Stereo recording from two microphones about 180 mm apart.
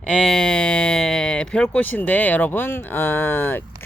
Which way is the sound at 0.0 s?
5° left (ahead or behind).